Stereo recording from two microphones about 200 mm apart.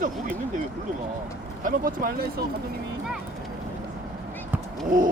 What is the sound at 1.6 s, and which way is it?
Speech, 45° right (ahead or behind).